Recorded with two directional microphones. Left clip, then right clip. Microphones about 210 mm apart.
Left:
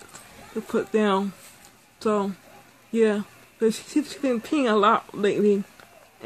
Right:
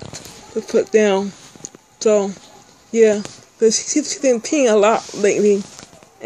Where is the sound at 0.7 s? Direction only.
10° left (ahead or behind).